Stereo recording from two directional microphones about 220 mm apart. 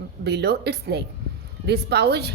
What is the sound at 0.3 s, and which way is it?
A woman's voice, 50° right (ahead or behind).